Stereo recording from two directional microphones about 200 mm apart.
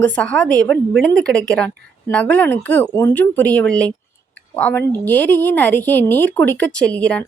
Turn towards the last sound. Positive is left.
turn(degrees=5)  # may be behind; listen again after turning